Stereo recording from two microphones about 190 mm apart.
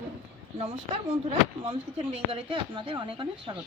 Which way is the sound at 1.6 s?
30° right (ahead or behind).